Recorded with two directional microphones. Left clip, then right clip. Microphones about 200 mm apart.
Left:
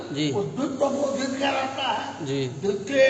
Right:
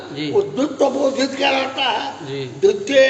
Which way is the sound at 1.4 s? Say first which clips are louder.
Right 7 dB; 50° right (ahead or behind).